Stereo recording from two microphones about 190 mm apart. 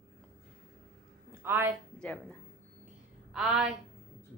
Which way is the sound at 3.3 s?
5° right (ahead or behind).